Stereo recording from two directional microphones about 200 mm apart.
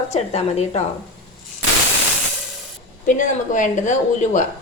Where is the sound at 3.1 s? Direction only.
40° left (ahead or behind).